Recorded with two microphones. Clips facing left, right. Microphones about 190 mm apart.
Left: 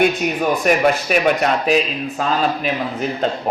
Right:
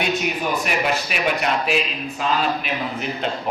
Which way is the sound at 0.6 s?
45° left (ahead or behind).